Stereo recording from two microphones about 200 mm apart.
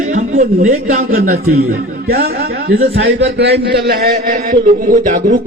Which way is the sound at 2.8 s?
55° right (ahead or behind).